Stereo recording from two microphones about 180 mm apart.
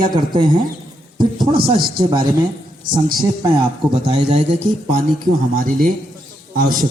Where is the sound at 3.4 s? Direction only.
30° right (ahead or behind).